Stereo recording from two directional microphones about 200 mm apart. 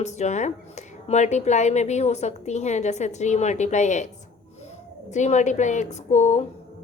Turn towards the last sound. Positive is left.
turn(degrees=35)  # may be behind; listen again after turning